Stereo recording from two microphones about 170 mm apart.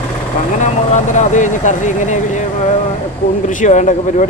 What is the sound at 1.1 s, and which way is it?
Speech, 45° left (ahead or behind).